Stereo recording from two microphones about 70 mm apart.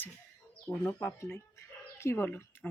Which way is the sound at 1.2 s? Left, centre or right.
Left.